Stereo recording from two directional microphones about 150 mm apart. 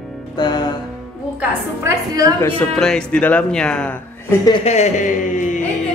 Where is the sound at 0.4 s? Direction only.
30° left (ahead or behind).